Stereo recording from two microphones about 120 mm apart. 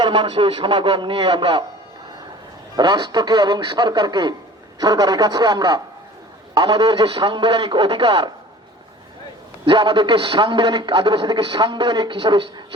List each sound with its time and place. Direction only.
0.0 s a man's voice: 40° right (ahead or behind)
2.7 s a man's voice: 35° right (ahead or behind)
9.6 s a man's voice: 45° right (ahead or behind)